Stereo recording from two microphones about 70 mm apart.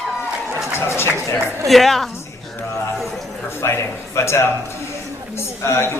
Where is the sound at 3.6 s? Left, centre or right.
Left.